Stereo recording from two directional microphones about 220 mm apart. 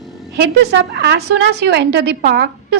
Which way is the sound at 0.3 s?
50° right (ahead or behind).